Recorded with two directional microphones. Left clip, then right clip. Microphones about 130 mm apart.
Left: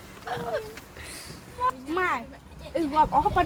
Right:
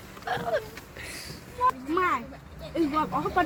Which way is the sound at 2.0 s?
50° left (ahead or behind).